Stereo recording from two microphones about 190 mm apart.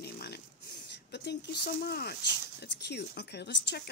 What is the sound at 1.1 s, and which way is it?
Speech, 60° left (ahead or behind).